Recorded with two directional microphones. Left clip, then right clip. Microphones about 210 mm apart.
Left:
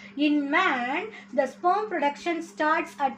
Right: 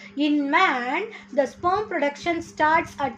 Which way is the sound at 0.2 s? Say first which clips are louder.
Right 3 dB; 50° right (ahead or behind).